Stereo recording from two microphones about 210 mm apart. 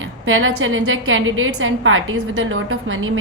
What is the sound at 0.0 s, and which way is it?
A woman's voice, 70° right (ahead or behind).